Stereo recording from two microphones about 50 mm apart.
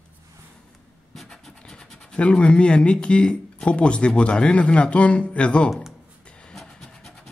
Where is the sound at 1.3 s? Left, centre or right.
Centre.